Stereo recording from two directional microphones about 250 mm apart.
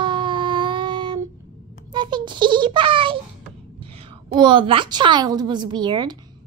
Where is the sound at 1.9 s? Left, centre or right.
Centre.